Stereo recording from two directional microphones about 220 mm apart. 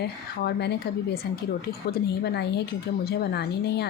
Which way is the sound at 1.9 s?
50° left (ahead or behind).